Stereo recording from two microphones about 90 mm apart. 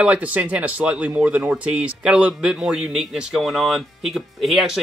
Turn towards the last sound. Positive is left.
turn(degrees=0)  # may be behind; listen again after turning